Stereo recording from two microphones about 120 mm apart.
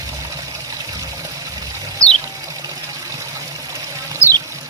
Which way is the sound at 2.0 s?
30° right (ahead or behind).